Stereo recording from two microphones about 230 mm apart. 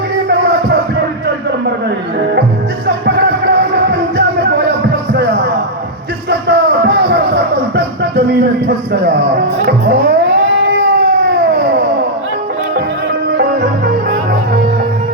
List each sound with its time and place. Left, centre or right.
2.8 s music: right
6.5 s music: right